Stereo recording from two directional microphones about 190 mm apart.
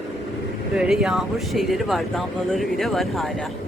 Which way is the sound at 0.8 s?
5° right (ahead or behind).